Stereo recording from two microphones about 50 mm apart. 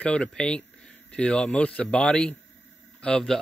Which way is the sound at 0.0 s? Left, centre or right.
Centre.